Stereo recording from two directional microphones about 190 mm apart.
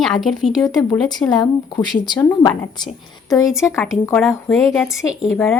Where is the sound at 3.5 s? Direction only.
15° left (ahead or behind).